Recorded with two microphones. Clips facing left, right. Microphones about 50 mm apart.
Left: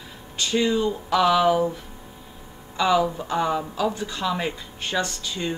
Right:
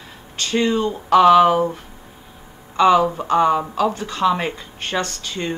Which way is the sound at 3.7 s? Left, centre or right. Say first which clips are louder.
Right 5 dB; right.